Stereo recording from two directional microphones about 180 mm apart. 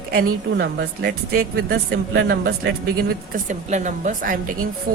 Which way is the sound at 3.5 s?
45° right (ahead or behind).